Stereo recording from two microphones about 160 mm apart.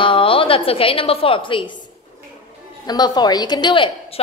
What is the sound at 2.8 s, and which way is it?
A woman's voice, 25° left (ahead or behind).